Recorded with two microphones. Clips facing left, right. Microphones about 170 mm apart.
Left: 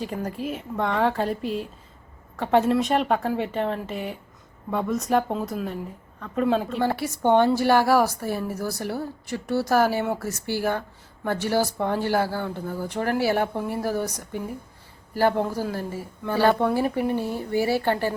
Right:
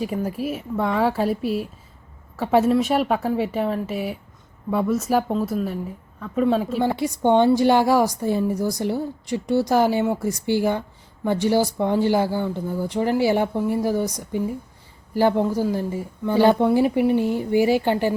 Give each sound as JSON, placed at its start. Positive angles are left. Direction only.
{"t": 0.0, "sound": "a woman's voice", "side_deg": -5}
{"t": 6.8, "sound": "a woman's voice", "side_deg": -15}